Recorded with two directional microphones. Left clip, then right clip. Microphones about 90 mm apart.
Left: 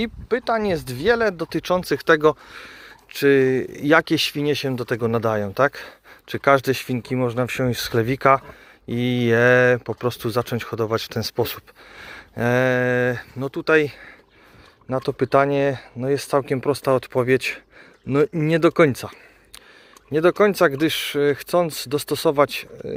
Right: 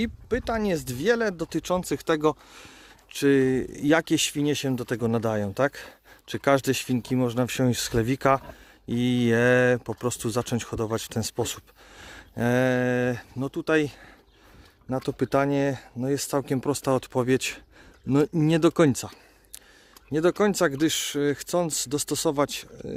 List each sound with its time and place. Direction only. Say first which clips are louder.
0.0 s speech: left 5 dB; 45° right (ahead or behind); by 2.3 s 30° right (ahead or behind)
2.5 s a sound: left 8 dB; 45° right (ahead or behind)
3.1 s speech: left 5 dB; 65° right (ahead or behind)
3.3 s speech: left 5 dB; 50° right (ahead or behind)
3.8 s speech: left 5 dB; 35° right (ahead or behind); by 14.1 s 55° right (ahead or behind)
14.8 s speech: left 6 dB; 40° right (ahead or behind)